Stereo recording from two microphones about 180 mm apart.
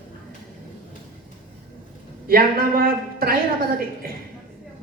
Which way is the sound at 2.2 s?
55° right (ahead or behind).